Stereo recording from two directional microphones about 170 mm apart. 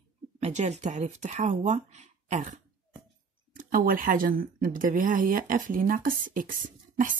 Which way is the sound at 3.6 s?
55° right (ahead or behind).